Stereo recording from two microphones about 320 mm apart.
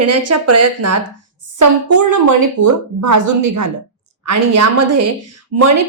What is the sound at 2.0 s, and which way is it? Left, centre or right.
A woman's voice, right.